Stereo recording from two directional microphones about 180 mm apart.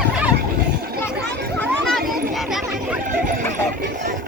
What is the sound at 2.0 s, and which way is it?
Children playing, 55° right (ahead or behind).